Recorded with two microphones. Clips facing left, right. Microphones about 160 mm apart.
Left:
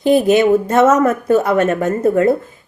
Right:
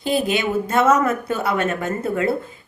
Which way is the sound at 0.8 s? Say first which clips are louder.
Left 2 dB; 45° left (ahead or behind).